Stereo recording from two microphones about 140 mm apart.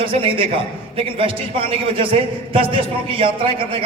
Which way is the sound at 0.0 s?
40° right (ahead or behind).